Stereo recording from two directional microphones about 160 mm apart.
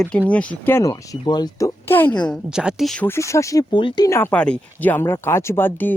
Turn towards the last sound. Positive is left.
turn(degrees=10)  # may be behind; listen again after turning